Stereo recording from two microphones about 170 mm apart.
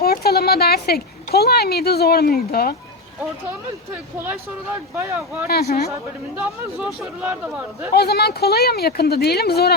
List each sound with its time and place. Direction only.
0.0 s speech: 65° left (ahead or behind)
4.2 s speech: 10° right (ahead or behind)
5.5 s speech: 65° left (ahead or behind)
6.3 s speech: 5° right (ahead or behind)
7.9 s speech: 70° left (ahead or behind)